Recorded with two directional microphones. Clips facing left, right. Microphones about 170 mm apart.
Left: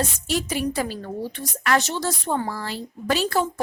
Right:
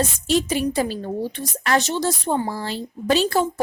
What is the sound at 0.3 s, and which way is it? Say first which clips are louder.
A woman's voice: right 5 dB; 25° right (ahead or behind).